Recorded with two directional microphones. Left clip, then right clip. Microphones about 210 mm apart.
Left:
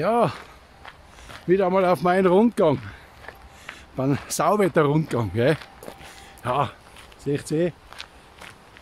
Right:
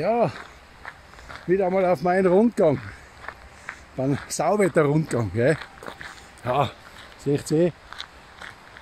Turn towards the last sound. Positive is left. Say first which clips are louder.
# right 2 dB
turn(degrees=-35)  # may be behind; listen again after turning